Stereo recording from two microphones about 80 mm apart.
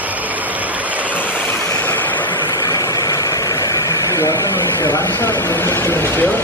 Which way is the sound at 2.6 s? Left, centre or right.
Left.